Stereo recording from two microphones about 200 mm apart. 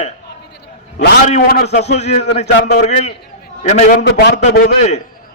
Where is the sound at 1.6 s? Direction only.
30° left (ahead or behind).